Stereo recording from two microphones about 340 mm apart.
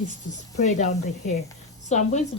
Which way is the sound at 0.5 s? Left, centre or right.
Left.